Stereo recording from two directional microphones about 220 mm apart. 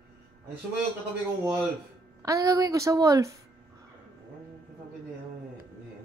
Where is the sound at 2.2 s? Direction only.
15° right (ahead or behind).